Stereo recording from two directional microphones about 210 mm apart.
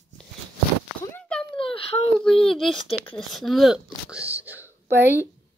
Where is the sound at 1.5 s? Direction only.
25° left (ahead or behind).